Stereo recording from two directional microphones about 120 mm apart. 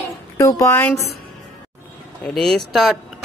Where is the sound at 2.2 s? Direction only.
5° left (ahead or behind).